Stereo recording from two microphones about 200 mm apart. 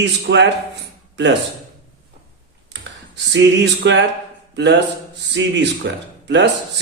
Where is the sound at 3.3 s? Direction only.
60° right (ahead or behind).